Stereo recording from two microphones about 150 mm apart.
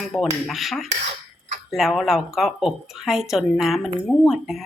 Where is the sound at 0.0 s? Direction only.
Centre (ahead or behind).